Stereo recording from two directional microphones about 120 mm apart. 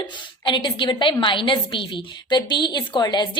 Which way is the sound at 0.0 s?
40° left (ahead or behind).